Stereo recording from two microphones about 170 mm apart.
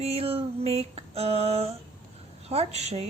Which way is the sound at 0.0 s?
35° right (ahead or behind).